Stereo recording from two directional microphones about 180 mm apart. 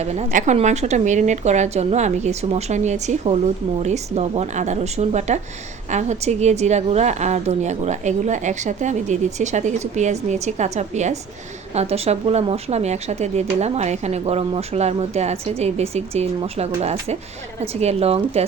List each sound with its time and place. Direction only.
0.0 s speech: 35° right (ahead or behind)